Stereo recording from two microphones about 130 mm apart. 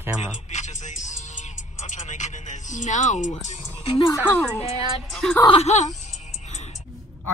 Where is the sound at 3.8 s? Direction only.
40° left (ahead or behind).